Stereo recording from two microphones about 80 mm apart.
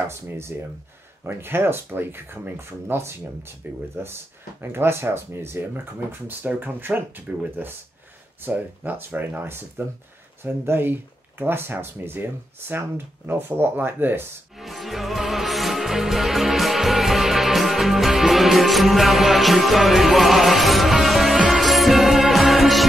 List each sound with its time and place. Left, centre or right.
0.1 s speech: right
14.6 s music: centre